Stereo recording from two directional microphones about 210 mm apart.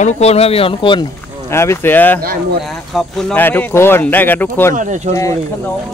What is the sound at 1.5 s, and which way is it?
Speech, 10° left (ahead or behind).